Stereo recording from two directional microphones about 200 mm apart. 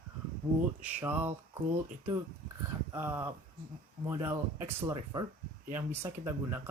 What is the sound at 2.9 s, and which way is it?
Speech, 15° right (ahead or behind).